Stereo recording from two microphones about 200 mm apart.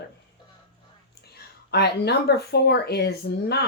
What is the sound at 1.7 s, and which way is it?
A woman's voice, 55° left (ahead or behind).